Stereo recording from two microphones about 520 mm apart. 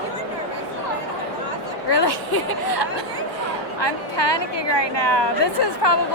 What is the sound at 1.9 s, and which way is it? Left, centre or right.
A woman's voice, left.